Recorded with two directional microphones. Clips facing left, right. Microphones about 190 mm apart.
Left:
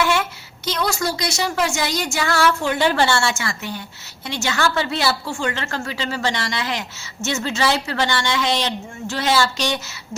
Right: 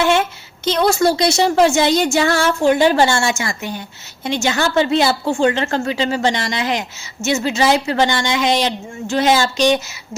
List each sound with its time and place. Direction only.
0.0 s a woman's voice: 25° right (ahead or behind)
2.7 s a woman's voice: 15° right (ahead or behind)